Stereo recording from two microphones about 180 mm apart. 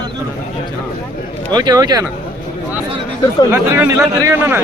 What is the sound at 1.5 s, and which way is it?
Speech, 25° right (ahead or behind).